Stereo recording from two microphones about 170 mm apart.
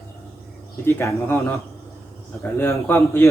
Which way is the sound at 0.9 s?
15° left (ahead or behind).